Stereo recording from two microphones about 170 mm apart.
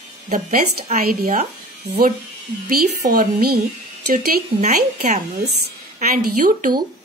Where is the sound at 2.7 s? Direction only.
60° right (ahead or behind).